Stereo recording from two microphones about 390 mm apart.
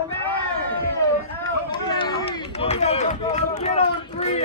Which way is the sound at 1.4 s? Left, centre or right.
Centre.